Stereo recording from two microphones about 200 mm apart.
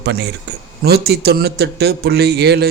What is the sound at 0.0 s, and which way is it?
A man's voice, 55° right (ahead or behind).